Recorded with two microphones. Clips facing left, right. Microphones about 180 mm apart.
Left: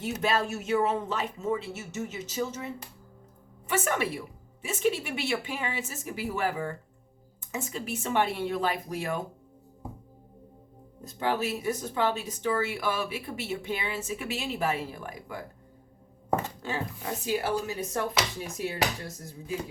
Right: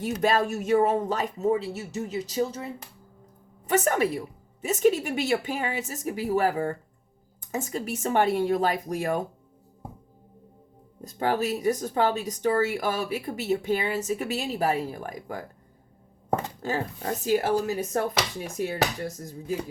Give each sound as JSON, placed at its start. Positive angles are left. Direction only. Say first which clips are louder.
{"t": 0.0, "sound": "a woman's voice", "louder": "right 4 dB", "side_deg": -45}
{"t": 11.2, "sound": "speech", "louder": "right 4 dB", "side_deg": -45}
{"t": 16.6, "sound": "speech", "louder": "right 4 dB", "side_deg": -40}
{"t": 19.2, "sound": "speech", "louder": "right 4 dB", "side_deg": -40}